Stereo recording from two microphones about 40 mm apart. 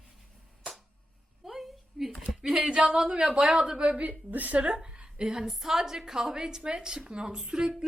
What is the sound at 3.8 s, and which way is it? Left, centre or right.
Speech, right.